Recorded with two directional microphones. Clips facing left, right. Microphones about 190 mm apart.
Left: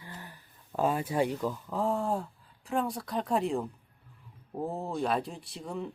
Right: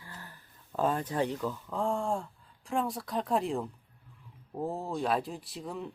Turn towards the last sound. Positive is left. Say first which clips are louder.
# left 1 dB
turn(degrees=0)  # may be behind; listen again after turning